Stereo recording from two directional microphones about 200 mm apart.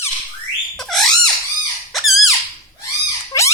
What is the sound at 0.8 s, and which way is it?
Bird, centre (ahead or behind).